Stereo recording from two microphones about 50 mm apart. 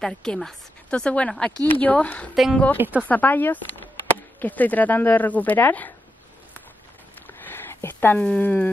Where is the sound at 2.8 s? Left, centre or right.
Right.